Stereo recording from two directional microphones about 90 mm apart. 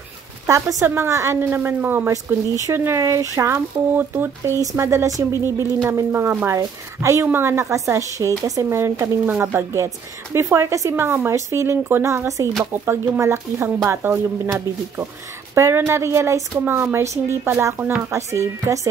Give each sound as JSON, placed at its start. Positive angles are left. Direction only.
{"t": 0.5, "sound": "a woman's voice", "side_deg": -35}
{"t": 12.7, "sound": "a woman's voice", "side_deg": -25}
{"t": 15.5, "sound": "speech", "side_deg": -30}